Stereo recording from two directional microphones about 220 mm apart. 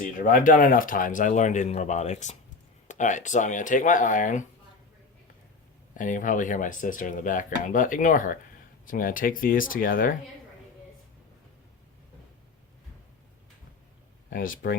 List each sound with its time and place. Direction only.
0.2 s speech: 40° left (ahead or behind)
6.0 s speech: 35° left (ahead or behind)
14.3 s speech: 40° left (ahead or behind)